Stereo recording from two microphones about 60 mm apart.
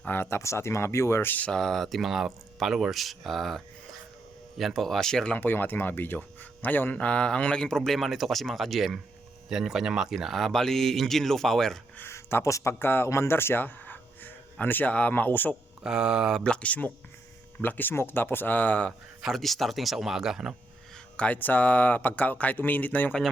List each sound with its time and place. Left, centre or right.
0.0 s speech: left
1.2 s speech: left
1.5 s speech: centre
5.4 s speech: left; by 11.8 s centre
12.1 s speech: left
12.8 s speech: left
15.8 s mantra: centre
16.4 s speech: centre
19.2 s speech: centre
21.2 s speech: left